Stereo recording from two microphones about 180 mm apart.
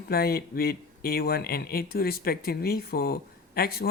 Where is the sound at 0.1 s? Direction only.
55° left (ahead or behind).